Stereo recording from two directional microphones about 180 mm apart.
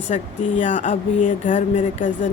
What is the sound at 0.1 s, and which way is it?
Speech, 35° left (ahead or behind).